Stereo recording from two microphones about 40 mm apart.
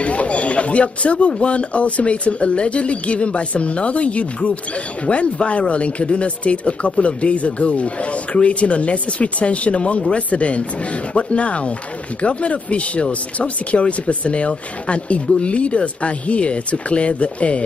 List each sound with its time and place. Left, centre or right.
0.0 s speech: left